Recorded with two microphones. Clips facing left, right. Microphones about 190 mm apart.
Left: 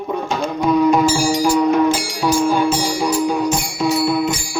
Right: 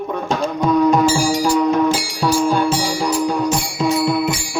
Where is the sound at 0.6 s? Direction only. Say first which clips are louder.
Even; 5° left (ahead or behind).